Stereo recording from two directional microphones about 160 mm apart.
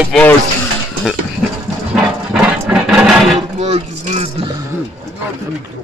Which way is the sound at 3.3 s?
40° right (ahead or behind).